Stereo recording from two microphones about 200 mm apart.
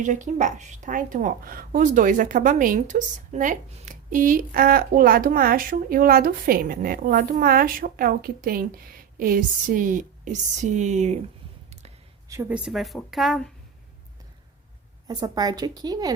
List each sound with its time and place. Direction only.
0.0 s a woman's voice: 40° right (ahead or behind)
12.3 s speech: 10° right (ahead or behind)
15.0 s a woman's voice: 20° right (ahead or behind)